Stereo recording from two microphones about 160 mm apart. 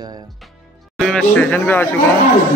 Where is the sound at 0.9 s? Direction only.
5° left (ahead or behind).